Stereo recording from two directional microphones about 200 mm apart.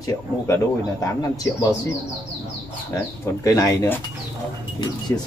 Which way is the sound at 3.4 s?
15° left (ahead or behind).